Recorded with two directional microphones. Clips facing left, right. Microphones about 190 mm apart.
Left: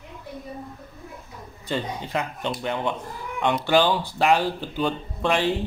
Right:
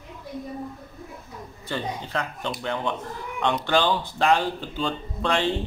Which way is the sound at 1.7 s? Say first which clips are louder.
Left 2 dB; 15° left (ahead or behind).